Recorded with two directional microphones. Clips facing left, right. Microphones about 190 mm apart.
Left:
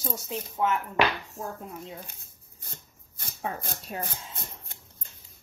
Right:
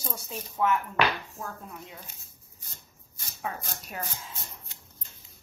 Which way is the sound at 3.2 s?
55° left (ahead or behind).